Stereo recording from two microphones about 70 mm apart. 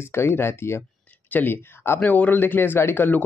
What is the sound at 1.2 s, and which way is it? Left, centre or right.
Speech, left.